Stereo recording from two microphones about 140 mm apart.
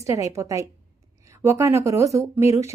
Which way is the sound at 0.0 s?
20° right (ahead or behind).